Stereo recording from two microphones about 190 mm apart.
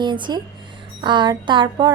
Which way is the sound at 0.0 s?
25° right (ahead or behind).